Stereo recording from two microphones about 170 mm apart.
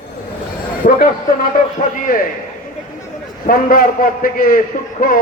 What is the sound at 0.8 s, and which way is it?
Speech, 55° left (ahead or behind).